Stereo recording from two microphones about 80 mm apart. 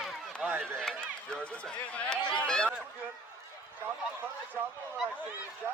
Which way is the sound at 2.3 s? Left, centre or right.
Centre.